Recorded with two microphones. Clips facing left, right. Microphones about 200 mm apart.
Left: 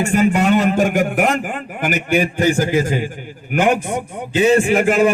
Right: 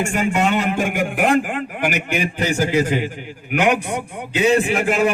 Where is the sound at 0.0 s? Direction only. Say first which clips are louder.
Left 4 dB; 35° left (ahead or behind).